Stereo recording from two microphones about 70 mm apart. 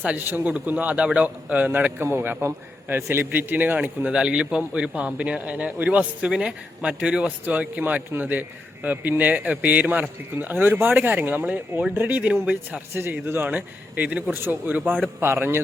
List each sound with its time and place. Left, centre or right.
0.0 s speech: centre
2.0 s a man's voice: right; by 12.8 s centre
12.9 s speech: right
13.5 s speech: right
15.2 s speech: right